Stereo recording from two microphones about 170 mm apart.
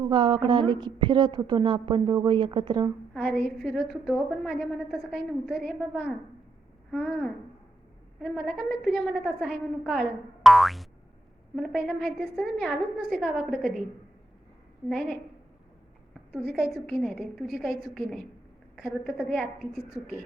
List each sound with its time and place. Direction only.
0.0 s a woman's voice: 30° right (ahead or behind)
3.2 s a woman's voice: centre (ahead or behind)
14.8 s a woman's voice: centre (ahead or behind)
16.9 s a woman's voice: centre (ahead or behind)